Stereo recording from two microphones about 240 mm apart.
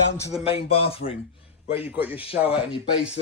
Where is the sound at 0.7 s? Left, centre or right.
Left.